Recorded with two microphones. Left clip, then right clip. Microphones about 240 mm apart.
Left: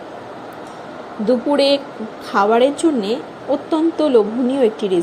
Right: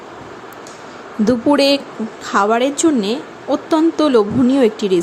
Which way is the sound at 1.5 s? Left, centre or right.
Right.